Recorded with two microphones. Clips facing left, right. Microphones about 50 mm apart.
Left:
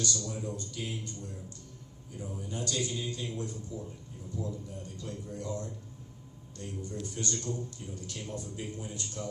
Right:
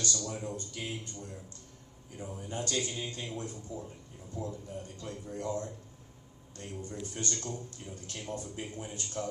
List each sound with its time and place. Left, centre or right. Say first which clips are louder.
0.0 s a man's voice: left 1 dB; right